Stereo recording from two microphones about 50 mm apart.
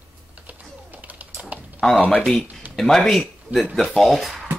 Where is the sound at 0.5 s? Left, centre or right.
Right.